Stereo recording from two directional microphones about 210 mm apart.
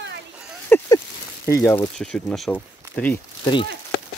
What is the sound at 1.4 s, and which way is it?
Speech, 10° left (ahead or behind).